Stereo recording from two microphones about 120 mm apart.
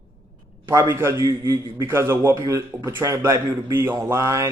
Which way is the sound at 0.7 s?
20° right (ahead or behind).